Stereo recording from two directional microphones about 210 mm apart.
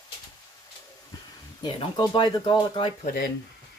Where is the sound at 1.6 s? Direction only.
20° left (ahead or behind).